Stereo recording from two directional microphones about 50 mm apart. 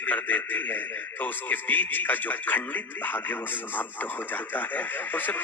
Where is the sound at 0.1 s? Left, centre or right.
Left.